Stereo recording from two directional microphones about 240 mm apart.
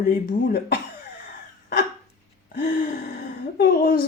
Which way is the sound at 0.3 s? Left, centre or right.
Left.